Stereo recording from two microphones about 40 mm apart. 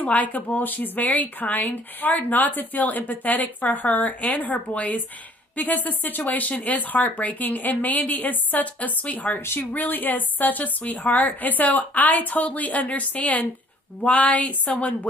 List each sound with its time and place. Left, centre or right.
0.0 s a woman's voice: left